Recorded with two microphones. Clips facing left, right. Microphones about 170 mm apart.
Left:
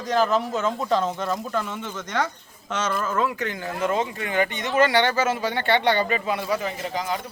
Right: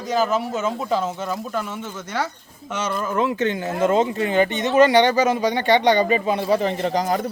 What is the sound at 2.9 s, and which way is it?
Speech, 20° right (ahead or behind).